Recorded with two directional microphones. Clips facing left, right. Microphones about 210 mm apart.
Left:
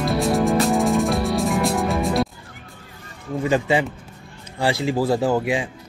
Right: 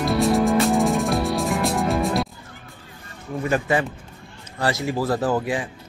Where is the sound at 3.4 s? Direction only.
15° left (ahead or behind).